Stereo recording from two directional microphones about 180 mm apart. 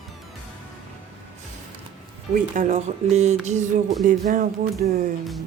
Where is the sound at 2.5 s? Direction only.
45° right (ahead or behind).